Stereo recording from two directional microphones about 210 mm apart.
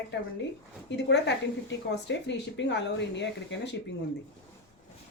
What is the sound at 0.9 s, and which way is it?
Speech, 55° left (ahead or behind).